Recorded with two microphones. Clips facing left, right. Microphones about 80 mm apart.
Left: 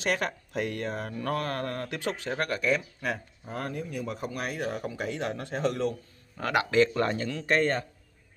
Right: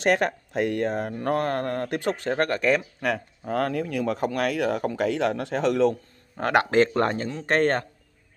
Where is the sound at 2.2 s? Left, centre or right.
Right.